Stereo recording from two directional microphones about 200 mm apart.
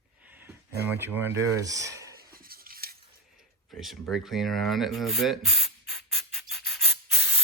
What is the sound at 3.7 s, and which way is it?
Ratchet, centre (ahead or behind).